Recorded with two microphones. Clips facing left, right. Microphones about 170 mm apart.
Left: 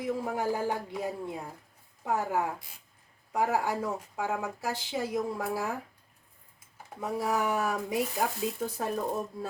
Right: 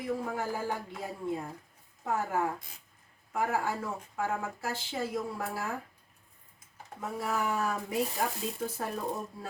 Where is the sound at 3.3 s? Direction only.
15° left (ahead or behind).